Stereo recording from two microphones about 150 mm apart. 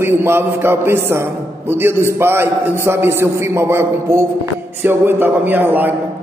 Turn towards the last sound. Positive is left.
turn(degrees=-10)  # may be behind; listen again after turning